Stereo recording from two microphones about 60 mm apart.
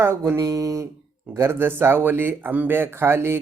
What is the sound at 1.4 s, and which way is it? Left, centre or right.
Speech, right.